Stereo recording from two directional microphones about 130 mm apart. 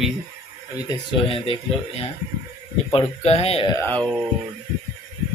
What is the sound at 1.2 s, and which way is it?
Speech, 45° left (ahead or behind).